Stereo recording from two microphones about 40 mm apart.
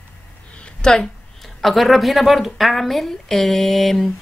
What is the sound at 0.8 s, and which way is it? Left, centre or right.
Speech, centre.